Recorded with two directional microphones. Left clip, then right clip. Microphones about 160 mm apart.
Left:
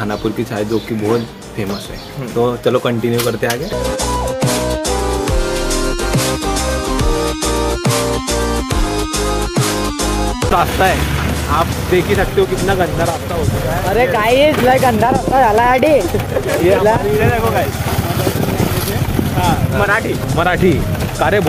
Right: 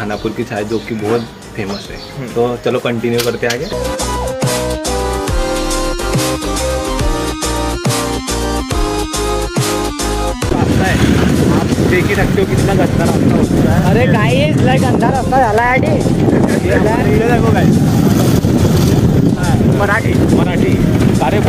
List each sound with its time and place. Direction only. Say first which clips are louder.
13.9 s speech: left 4 dB; 90° right